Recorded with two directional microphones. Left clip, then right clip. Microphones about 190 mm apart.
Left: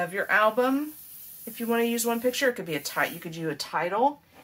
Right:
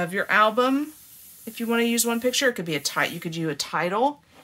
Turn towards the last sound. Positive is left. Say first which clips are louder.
# right 2 dB
turn(degrees=-50)  # may be behind; listen again after turning